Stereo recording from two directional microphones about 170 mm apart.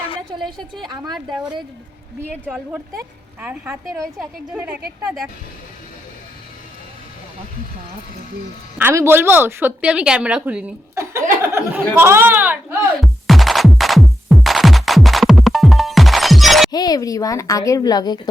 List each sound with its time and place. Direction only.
0.9 s a woman's voice: 25° right (ahead or behind)
2.7 s a woman's voice: 10° right (ahead or behind)
8.8 s a woman's voice: 15° right (ahead or behind)
13.0 s music: centre (ahead or behind)
16.7 s a woman's voice: 20° left (ahead or behind)